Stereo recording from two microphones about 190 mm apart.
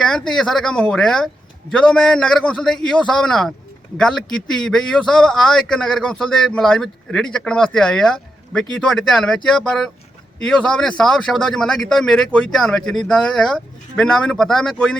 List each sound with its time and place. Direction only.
0.0 s speech: centre (ahead or behind)